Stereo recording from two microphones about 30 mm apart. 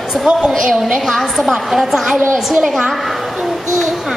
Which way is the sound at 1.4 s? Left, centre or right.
Centre.